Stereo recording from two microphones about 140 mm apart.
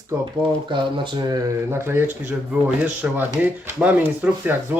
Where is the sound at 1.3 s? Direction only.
20° right (ahead or behind).